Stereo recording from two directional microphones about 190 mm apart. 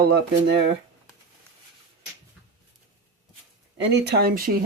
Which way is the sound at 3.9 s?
65° right (ahead or behind).